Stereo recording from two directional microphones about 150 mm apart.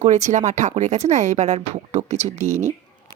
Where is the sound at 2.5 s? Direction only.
15° right (ahead or behind).